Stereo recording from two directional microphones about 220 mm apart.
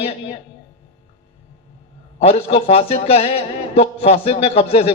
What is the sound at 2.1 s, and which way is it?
Speech, 25° left (ahead or behind).